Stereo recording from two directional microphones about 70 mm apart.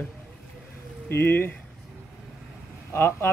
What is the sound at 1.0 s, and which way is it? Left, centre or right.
Speech, left.